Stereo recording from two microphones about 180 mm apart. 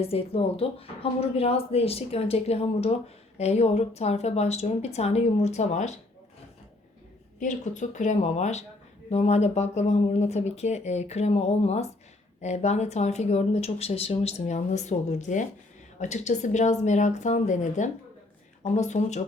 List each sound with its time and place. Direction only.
0.0 s speech: 30° left (ahead or behind)
7.3 s a woman's voice: 45° left (ahead or behind)